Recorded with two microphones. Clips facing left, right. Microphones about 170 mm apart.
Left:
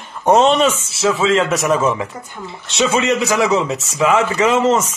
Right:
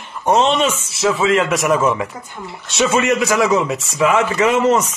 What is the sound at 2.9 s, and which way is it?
A man's voice, 25° left (ahead or behind).